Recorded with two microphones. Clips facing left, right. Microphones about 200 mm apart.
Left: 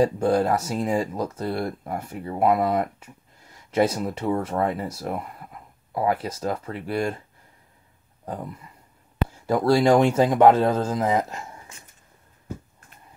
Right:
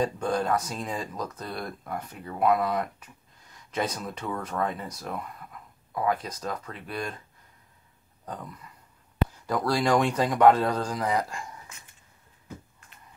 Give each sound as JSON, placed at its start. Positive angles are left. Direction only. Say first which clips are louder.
{"t": 0.0, "sound": "speech", "louder": "left 7 dB", "side_deg": 30}
{"t": 8.3, "sound": "speech", "louder": "left 6 dB", "side_deg": 30}